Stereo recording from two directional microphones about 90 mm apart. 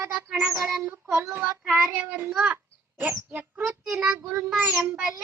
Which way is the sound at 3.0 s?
25° right (ahead or behind).